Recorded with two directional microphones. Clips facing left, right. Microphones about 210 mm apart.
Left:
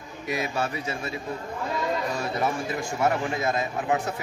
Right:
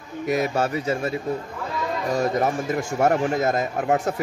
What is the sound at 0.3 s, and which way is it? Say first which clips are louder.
Speech: right 6 dB; 45° right (ahead or behind).